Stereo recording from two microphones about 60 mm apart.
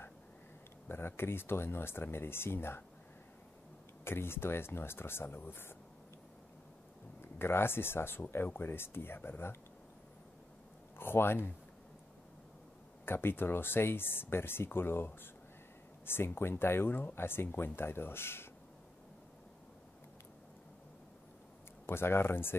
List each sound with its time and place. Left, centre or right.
0.8 s speech: left
4.0 s speech: left
7.2 s speech: left
11.0 s speech: left
13.0 s speech: left
21.8 s speech: left